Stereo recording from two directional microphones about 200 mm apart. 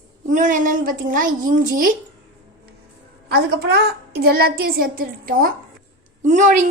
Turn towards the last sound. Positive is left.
turn(degrees=-40)  # may be behind; listen again after turning